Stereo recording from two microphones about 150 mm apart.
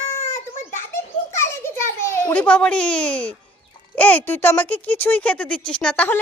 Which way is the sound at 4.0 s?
10° left (ahead or behind).